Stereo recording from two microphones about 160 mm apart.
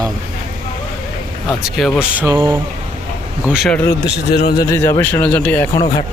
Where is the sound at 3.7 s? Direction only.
15° left (ahead or behind).